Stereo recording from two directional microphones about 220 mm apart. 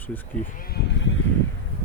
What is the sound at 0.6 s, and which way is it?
Speech, 45° left (ahead or behind).